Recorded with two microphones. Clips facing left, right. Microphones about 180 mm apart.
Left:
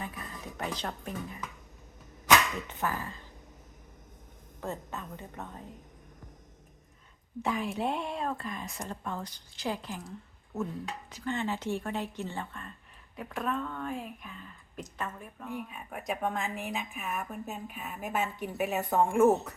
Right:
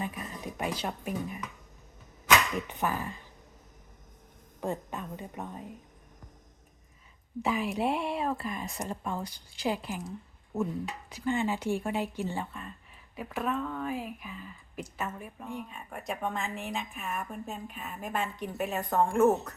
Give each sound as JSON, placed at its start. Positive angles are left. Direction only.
{"t": 0.0, "sound": "a sound", "side_deg": -15}
{"t": 2.6, "sound": "speech", "side_deg": -15}
{"t": 4.6, "sound": "speech", "side_deg": -15}
{"t": 7.4, "sound": "speech", "side_deg": -5}
{"t": 11.1, "sound": "speech", "side_deg": -10}
{"t": 15.4, "sound": "speech", "side_deg": 5}